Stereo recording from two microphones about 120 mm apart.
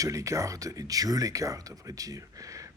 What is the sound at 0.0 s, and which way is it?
Speech, 25° right (ahead or behind).